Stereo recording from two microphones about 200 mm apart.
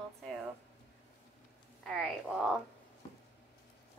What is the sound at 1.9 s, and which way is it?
Speech, centre (ahead or behind).